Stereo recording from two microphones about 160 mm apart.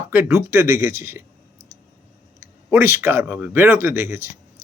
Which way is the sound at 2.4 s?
15° right (ahead or behind).